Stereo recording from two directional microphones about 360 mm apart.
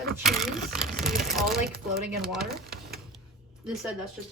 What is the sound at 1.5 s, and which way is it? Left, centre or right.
Speech, right.